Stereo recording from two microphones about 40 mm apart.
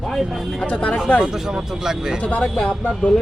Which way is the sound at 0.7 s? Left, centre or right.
Left.